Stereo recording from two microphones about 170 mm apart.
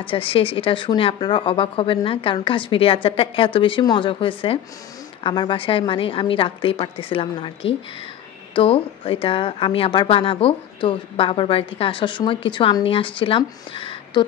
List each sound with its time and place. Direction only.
0.0 s speech: 35° left (ahead or behind)